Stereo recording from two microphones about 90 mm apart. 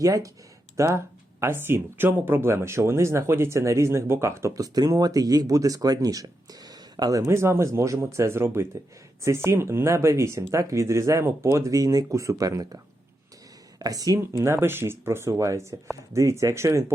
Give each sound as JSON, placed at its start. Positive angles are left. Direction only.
{"t": 0.0, "sound": "speech", "side_deg": -40}
{"t": 14.2, "sound": "speech", "side_deg": -30}